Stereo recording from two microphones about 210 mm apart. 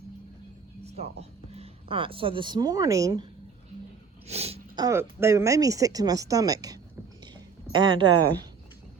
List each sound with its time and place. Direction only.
0.9 s speech: 30° right (ahead or behind)
4.3 s speech: 30° right (ahead or behind)